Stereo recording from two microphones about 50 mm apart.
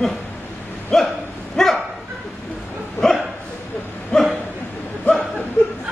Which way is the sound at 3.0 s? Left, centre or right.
Centre.